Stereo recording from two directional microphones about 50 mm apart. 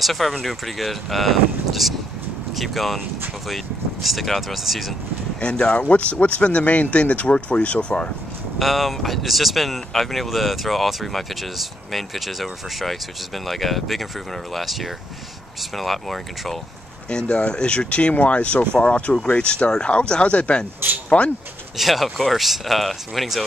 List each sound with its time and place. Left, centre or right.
0.0 s speech: centre
5.4 s speech: left
8.5 s speech: centre
17.1 s speech: centre
21.7 s speech: centre